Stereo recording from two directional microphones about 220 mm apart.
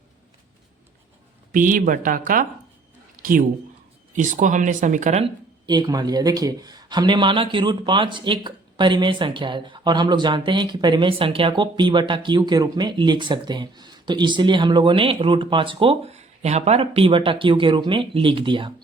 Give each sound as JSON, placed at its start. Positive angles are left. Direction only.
{"t": 1.5, "sound": "speech", "side_deg": -40}
{"t": 4.1, "sound": "speech", "side_deg": -35}
{"t": 5.6, "sound": "speech", "side_deg": -20}